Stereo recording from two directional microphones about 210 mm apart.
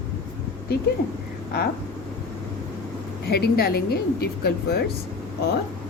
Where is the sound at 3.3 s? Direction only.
50° left (ahead or behind).